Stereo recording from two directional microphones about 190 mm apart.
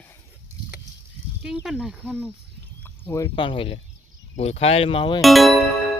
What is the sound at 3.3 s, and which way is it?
Speech, 25° left (ahead or behind).